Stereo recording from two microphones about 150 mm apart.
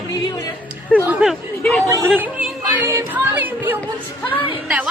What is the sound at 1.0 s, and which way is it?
Speech, 5° right (ahead or behind).